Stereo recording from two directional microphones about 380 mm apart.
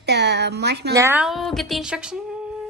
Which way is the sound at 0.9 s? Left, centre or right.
Centre.